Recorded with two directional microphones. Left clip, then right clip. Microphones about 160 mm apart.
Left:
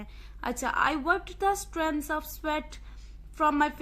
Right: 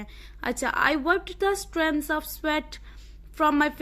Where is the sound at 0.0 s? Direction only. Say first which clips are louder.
Right 3 dB; 25° right (ahead or behind).